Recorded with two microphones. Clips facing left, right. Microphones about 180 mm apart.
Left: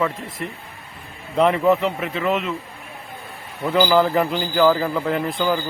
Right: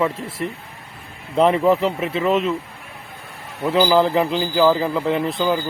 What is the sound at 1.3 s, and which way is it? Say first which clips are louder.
A man's voice: right 1 dB; 30° right (ahead or behind).